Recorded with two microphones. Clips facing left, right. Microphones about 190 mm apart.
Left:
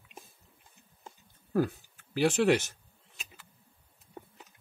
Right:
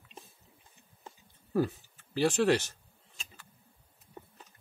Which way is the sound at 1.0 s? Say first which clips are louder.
Even; centre (ahead or behind).